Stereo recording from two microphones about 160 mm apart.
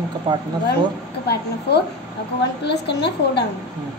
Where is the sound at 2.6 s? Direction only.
90° left.